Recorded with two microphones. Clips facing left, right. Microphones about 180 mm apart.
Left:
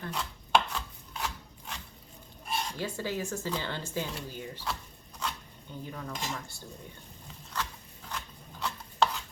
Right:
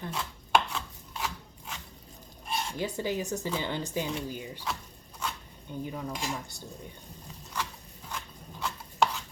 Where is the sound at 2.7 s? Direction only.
15° right (ahead or behind).